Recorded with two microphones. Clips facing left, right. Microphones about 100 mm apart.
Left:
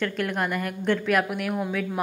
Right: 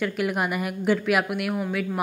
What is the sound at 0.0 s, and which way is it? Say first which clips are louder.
A woman's voice: right 1 dB; 10° right (ahead or behind).